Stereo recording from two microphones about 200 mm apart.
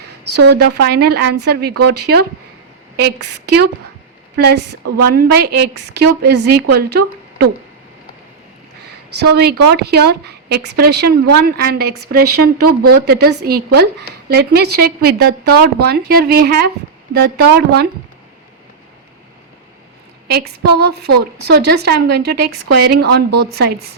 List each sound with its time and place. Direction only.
0.5 s a woman's voice: 55° right (ahead or behind)
9.1 s a woman's voice: 55° right (ahead or behind)
20.3 s a woman's voice: 55° right (ahead or behind)